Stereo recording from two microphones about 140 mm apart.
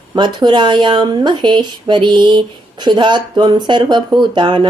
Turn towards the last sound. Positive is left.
turn(degrees=-35)  # may be behind; listen again after turning